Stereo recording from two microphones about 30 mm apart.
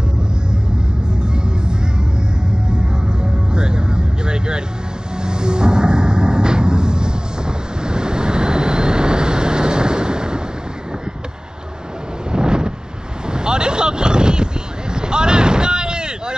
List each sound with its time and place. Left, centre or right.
1.0 s music: right
12.3 s wind noise: right
13.3 s a sound: right